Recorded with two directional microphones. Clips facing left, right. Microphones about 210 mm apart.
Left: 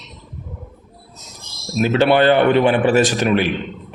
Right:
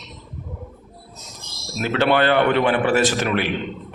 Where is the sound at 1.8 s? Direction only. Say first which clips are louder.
Left 4 dB; 15° left (ahead or behind).